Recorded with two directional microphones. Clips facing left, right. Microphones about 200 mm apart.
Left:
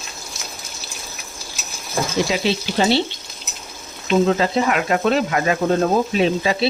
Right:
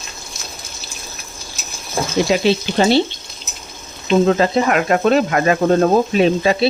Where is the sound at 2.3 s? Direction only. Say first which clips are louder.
Right 6 dB; 55° right (ahead or behind).